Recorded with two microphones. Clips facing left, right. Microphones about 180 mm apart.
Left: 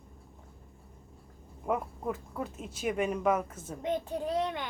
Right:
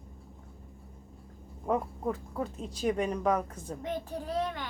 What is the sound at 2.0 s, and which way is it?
Speech, centre (ahead or behind).